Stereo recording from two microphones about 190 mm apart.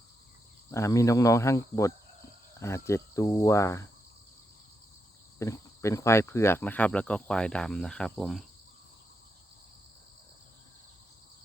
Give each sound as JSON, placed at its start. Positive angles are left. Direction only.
{"t": 0.7, "sound": "speech", "side_deg": 15}
{"t": 5.4, "sound": "speech", "side_deg": 15}